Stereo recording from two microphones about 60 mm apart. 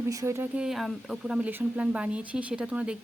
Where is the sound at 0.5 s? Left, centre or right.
Centre.